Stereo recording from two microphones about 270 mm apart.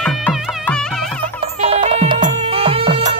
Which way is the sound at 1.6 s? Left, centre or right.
Centre.